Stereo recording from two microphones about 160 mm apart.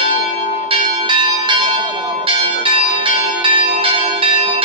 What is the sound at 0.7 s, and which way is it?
Church bell, 30° right (ahead or behind).